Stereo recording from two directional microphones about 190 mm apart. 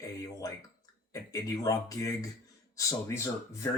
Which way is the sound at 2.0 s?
35° right (ahead or behind).